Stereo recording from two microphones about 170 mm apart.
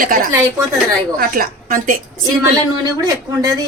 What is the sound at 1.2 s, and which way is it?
Speech, 55° right (ahead or behind).